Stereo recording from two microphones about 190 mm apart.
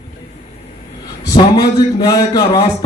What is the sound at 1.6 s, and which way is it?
A man's voice, 20° left (ahead or behind).